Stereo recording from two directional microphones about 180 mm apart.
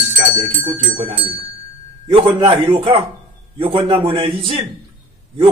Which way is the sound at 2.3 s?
30° right (ahead or behind).